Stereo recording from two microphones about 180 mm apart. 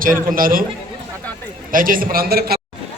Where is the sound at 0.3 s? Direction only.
50° right (ahead or behind).